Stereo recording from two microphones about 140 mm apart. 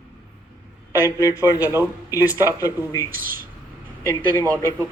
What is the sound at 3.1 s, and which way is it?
Speech, 90° right.